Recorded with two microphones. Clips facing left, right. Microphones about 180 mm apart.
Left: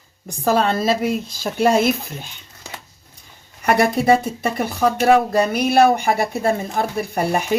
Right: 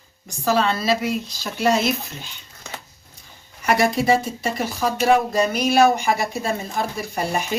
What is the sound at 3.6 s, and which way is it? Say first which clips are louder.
Speech: left 2 dB; 55° left (ahead or behind).